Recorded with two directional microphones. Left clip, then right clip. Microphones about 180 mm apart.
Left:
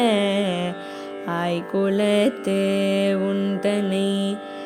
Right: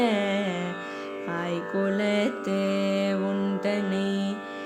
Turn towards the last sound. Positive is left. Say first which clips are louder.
# left 5 dB
turn(degrees=50)  # may be behind; listen again after turning